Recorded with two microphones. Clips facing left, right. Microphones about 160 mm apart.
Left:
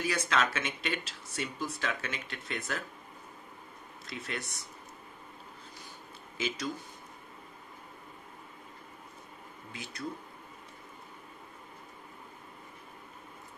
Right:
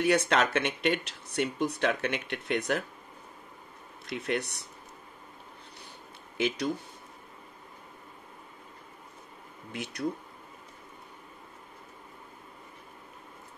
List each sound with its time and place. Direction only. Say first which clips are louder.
0.0 s speech: right 6 dB; 65° right (ahead or behind)
4.0 s speech: right 8 dB; 65° right (ahead or behind)
6.3 s speech: right 6 dB; 65° right (ahead or behind)
9.7 s speech: right 7 dB; 65° right (ahead or behind)